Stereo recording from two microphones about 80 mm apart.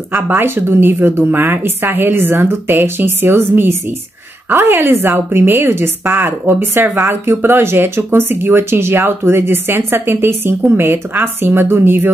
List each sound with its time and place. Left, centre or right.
0.1 s a woman's voice: right